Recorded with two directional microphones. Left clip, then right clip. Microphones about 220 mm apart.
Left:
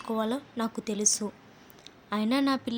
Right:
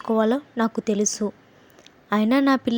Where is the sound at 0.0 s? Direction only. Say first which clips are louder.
Right 9 dB; 25° right (ahead or behind).